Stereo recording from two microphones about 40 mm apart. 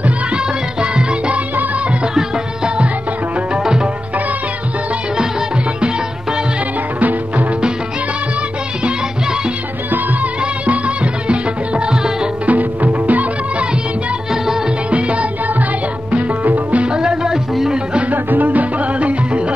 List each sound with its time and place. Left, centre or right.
0.0 s music: right
7.0 s music: right
11.2 s music: right
12.4 s music: right
14.3 s music: centre
14.9 s music: right
16.4 s music: right
16.8 s music: right
18.1 s music: right